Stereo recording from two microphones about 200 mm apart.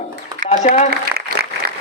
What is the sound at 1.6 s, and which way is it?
Applause, 45° right (ahead or behind).